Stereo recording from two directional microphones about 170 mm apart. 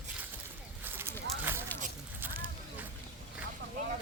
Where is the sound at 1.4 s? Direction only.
15° right (ahead or behind).